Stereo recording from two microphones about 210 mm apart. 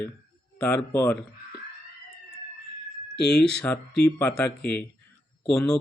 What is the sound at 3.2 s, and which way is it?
Speech, 5° left (ahead or behind).